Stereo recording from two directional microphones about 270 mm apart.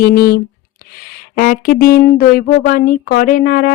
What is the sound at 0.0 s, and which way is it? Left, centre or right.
Speech, left.